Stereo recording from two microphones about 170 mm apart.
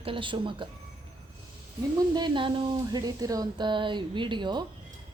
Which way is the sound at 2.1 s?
25° right (ahead or behind).